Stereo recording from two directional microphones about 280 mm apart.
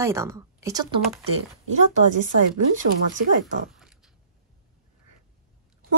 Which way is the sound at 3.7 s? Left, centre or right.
Centre.